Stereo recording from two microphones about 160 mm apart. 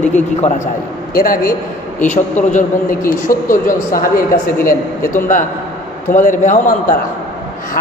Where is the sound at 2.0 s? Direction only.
45° left (ahead or behind).